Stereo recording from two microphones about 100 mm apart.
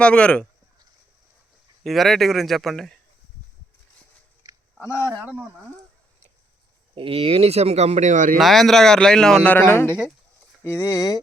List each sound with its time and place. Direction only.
0.0 s speech: 10° left (ahead or behind)
1.8 s speech: centre (ahead or behind)
4.4 s a sound: 35° right (ahead or behind)
4.9 s speech: 25° left (ahead or behind)
6.9 s speech: 65° right (ahead or behind); by 7.9 s 90° right
8.4 s speech: centre (ahead or behind); by 11.2 s 35° left (ahead or behind)